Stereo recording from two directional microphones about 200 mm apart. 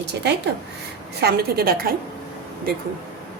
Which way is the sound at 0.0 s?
55° right (ahead or behind).